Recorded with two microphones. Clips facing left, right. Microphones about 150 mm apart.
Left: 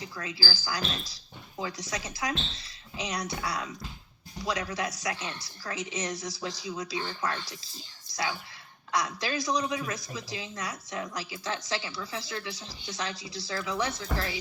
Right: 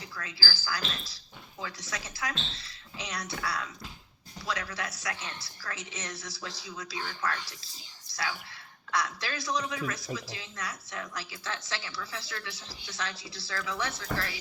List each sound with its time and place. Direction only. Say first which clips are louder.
0.0 s a woman's voice: left 4 dB; 20° left (ahead or behind)